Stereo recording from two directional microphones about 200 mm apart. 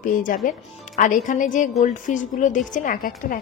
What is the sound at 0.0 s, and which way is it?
Speech, 40° left (ahead or behind).